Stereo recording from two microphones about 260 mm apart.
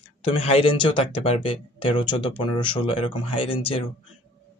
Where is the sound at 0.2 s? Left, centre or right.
Left.